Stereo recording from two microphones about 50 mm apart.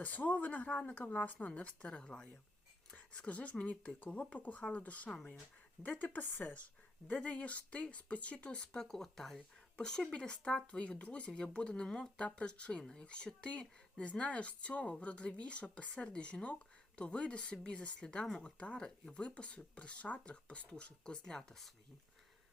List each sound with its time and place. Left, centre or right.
0.0 s speech: left
8.9 s speech: centre